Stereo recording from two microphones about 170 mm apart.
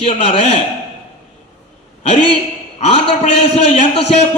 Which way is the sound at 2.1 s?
30° left (ahead or behind).